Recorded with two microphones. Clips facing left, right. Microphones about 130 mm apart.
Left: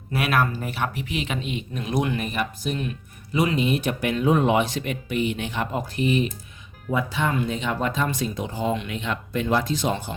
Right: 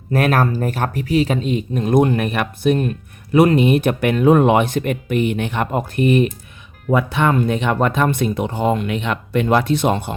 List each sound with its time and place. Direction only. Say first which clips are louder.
0.1 s speech: right 6 dB; 40° right (ahead or behind); by 10.2 s 60° right (ahead or behind)